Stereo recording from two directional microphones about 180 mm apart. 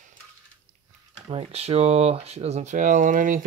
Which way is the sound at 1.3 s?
35° right (ahead or behind).